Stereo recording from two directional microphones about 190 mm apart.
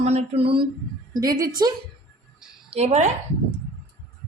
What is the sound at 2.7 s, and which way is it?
Speech, 35° right (ahead or behind).